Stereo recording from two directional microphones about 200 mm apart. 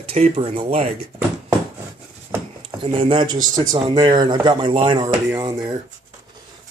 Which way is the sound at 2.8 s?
25° right (ahead or behind).